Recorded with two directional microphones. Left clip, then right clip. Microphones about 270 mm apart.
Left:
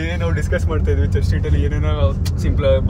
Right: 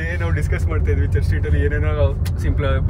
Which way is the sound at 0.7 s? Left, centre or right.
Centre.